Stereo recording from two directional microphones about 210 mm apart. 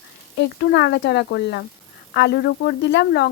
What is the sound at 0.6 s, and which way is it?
Speech, 55° left (ahead or behind).